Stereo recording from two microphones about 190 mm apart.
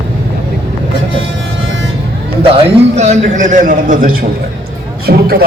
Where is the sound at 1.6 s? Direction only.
90° right.